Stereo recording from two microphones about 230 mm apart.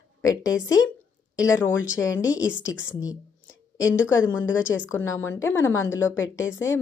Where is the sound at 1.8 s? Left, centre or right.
Centre.